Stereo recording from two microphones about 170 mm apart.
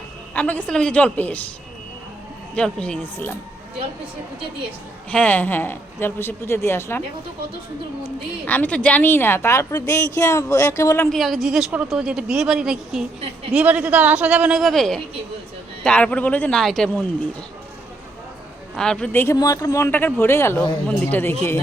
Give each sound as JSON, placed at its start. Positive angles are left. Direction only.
{"t": 0.3, "sound": "a man's voice", "side_deg": 10}
{"t": 2.6, "sound": "a man's voice", "side_deg": 5}
{"t": 5.1, "sound": "a man's voice", "side_deg": 10}
{"t": 8.4, "sound": "a man's voice", "side_deg": 10}
{"t": 11.1, "sound": "a woman's voice", "side_deg": 0}
{"t": 18.8, "sound": "a man's voice", "side_deg": 5}